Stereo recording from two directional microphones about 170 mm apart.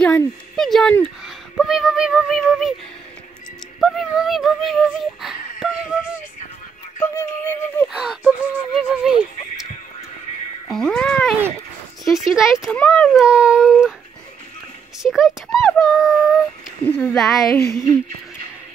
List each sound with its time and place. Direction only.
0.0 s speech: 10° left (ahead or behind)
3.8 s speech: centre (ahead or behind)
7.0 s synthetic singing: 15° left (ahead or behind)
7.9 s speech: 5° right (ahead or behind)
10.7 s speech: centre (ahead or behind)
15.0 s speech: centre (ahead or behind)
16.8 s speech: 5° left (ahead or behind)
17.6 s synthetic singing: 15° left (ahead or behind)